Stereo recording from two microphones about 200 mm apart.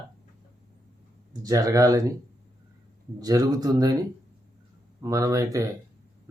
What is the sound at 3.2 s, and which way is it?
Speech, 20° right (ahead or behind).